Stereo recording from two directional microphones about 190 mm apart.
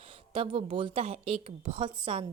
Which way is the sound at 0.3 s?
30° right (ahead or behind).